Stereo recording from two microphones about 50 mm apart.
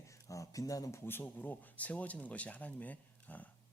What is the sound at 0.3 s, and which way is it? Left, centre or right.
Speech, left.